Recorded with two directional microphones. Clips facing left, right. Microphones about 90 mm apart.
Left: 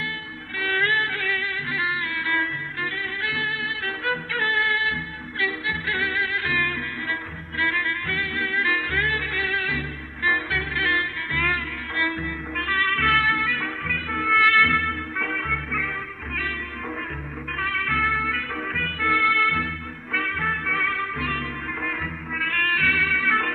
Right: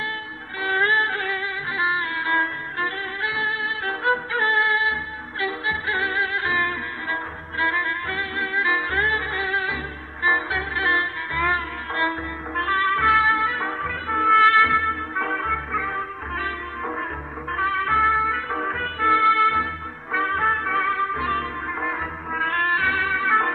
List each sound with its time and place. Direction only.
0.6 s music: 25° right (ahead or behind)
3.3 s music: 25° right (ahead or behind)
11.9 s trumpet: 30° right (ahead or behind)
17.5 s music: 30° right (ahead or behind)